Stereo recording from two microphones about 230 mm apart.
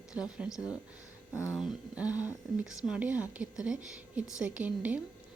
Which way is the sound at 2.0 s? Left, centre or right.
Centre.